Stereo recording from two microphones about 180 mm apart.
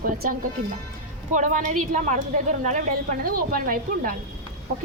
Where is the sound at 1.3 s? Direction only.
45° right (ahead or behind).